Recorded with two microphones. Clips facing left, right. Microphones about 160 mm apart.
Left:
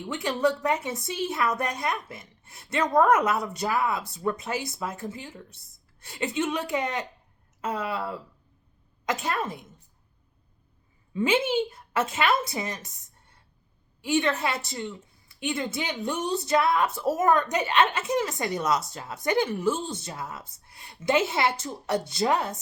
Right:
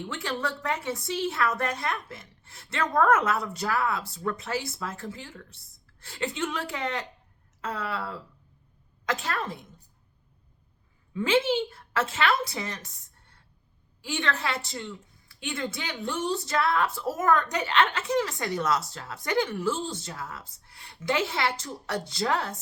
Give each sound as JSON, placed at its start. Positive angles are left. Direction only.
{"t": 0.1, "sound": "a woman's voice", "side_deg": 20}
{"t": 11.1, "sound": "a woman's voice", "side_deg": 20}